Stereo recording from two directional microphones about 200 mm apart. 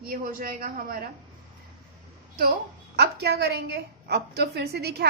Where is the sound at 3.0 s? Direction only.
55° right (ahead or behind).